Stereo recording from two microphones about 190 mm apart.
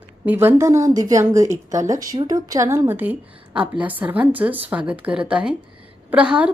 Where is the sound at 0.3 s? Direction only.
10° right (ahead or behind).